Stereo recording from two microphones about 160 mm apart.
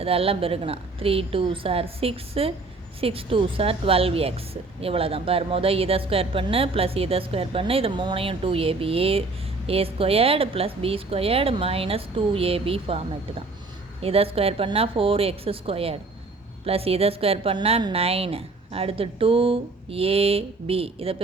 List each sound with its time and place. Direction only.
0.0 s a woman's voice: 35° right (ahead or behind)
14.0 s a woman's voice: 35° right (ahead or behind)